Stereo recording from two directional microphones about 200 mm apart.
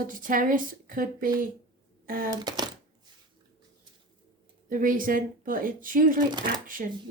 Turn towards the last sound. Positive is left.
turn(degrees=-40)  # may be behind; listen again after turning